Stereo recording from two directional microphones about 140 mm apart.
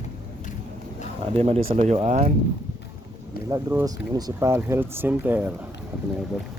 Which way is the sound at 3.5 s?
25° right (ahead or behind).